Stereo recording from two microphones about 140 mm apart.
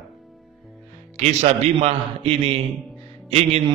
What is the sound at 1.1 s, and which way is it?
A man's voice, 50° right (ahead or behind).